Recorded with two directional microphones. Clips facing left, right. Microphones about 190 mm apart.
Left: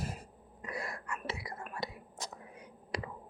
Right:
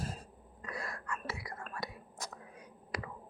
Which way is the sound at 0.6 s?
20° left (ahead or behind).